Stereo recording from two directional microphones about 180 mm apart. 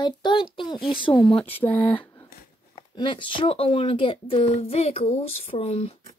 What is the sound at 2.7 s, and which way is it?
Speech, 30° left (ahead or behind).